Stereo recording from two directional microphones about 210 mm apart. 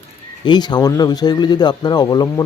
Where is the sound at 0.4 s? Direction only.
20° left (ahead or behind).